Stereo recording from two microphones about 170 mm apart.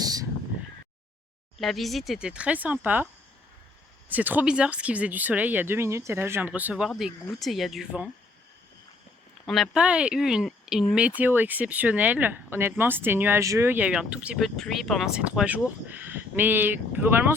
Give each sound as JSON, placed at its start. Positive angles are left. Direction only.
{"t": 0.0, "sound": "a sound", "side_deg": -20}
{"t": 1.5, "sound": "speech", "side_deg": 0}
{"t": 4.1, "sound": "speech", "side_deg": -10}
{"t": 9.5, "sound": "speech", "side_deg": 0}